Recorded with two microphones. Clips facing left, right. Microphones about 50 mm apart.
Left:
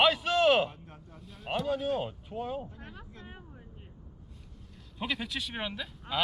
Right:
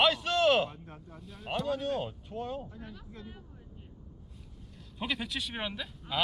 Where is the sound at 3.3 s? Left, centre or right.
Left.